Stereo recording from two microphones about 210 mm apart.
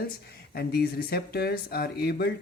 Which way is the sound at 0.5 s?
50° left (ahead or behind).